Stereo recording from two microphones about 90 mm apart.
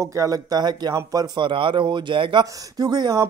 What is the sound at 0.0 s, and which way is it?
Speech, 35° right (ahead or behind).